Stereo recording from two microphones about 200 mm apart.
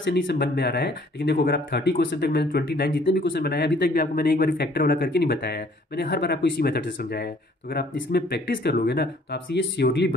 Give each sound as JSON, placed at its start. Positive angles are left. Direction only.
{"t": 0.0, "sound": "speech", "side_deg": 60}